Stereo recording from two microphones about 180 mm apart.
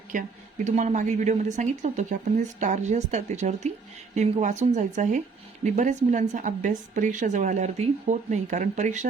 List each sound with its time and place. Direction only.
0.1 s a woman's voice: 45° right (ahead or behind)